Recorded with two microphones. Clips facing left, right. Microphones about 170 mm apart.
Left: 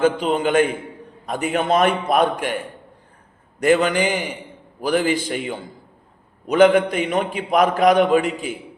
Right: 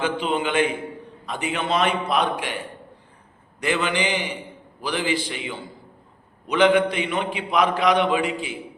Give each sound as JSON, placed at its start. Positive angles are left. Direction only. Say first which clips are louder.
{"t": 0.0, "sound": "a man's voice", "louder": "left 5 dB", "side_deg": 45}
{"t": 3.6, "sound": "a man's voice", "louder": "left 7 dB", "side_deg": 45}